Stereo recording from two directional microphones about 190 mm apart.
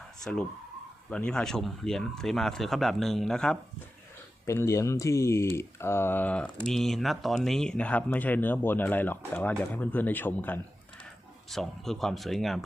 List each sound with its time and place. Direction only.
1.1 s speech: 5° left (ahead or behind)
4.4 s speech: 15° left (ahead or behind)